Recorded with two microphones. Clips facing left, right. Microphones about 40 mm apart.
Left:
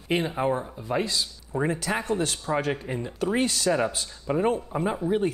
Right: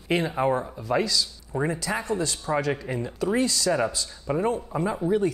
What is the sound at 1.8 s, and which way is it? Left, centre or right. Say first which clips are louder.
Speech: left 1 dB; left.